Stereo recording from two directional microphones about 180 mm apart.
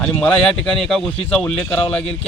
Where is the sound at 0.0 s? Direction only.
5° left (ahead or behind).